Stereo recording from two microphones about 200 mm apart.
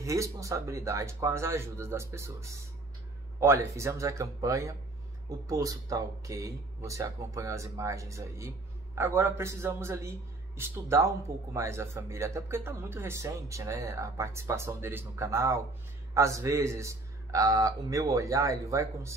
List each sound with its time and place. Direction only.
0.0 s speech: 15° right (ahead or behind)